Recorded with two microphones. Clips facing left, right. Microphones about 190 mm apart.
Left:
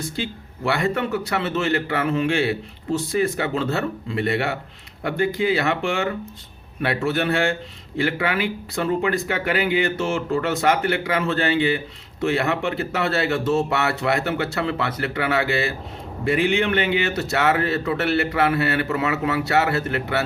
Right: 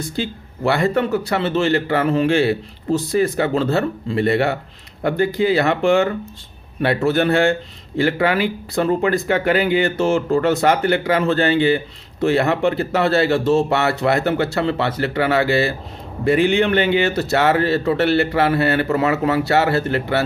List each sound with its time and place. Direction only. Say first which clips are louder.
0.2 s a man's voice: right 8 dB; 35° right (ahead or behind)